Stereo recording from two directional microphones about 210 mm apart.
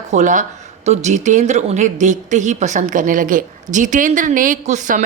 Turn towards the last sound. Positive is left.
turn(degrees=-35)  # may be behind; listen again after turning